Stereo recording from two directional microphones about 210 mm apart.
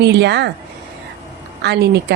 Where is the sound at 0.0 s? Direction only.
55° right (ahead or behind).